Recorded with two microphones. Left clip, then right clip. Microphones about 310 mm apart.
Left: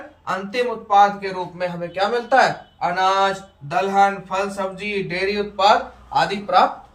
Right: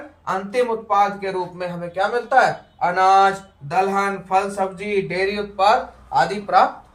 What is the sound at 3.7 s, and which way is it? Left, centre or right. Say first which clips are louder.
A man's voice: left 2 dB; centre.